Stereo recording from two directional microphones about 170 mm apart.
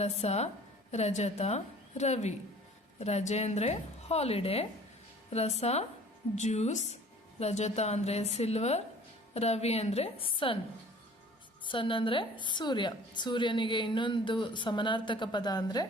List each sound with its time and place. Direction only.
0.0 s a woman's voice: 40° left (ahead or behind)
11.6 s a woman's voice: 30° left (ahead or behind)